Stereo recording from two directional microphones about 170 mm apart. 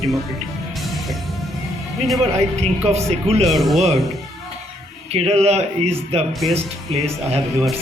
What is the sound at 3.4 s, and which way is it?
Speech, centre (ahead or behind).